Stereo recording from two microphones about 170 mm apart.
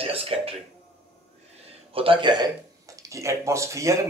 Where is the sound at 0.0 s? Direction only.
35° right (ahead or behind).